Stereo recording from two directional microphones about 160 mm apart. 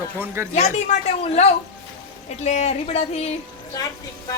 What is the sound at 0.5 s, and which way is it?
Speech, 45° left (ahead or behind).